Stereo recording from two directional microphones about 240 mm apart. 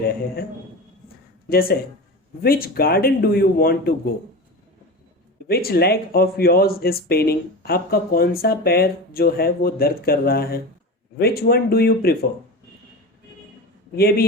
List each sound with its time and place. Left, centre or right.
1.5 s speech: left
5.5 s speech: left
13.9 s speech: left